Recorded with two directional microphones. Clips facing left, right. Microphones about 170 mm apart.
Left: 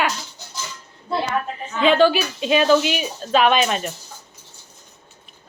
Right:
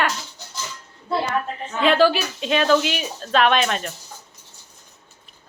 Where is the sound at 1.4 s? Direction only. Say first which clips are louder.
Left 1 dB; centre (ahead or behind).